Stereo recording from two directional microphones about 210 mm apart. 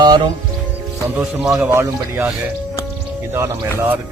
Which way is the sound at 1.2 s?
10° right (ahead or behind).